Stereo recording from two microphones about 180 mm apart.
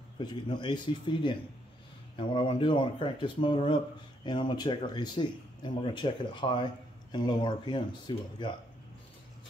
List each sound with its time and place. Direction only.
0.2 s speech: 25° left (ahead or behind)